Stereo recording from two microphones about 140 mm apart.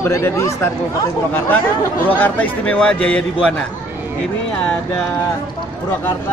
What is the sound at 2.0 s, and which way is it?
A man's voice, 10° left (ahead or behind).